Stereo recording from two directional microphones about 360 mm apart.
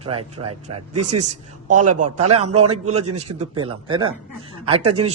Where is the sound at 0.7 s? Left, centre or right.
Right.